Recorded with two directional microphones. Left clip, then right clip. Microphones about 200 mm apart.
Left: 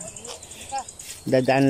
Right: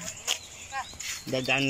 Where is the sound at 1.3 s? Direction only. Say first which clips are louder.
Left 8 dB; 25° left (ahead or behind).